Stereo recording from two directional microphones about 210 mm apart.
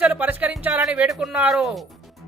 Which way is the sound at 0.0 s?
5° right (ahead or behind).